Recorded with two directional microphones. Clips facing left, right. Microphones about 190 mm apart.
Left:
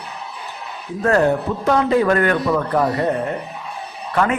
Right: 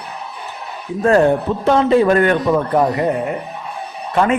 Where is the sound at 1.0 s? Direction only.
25° right (ahead or behind).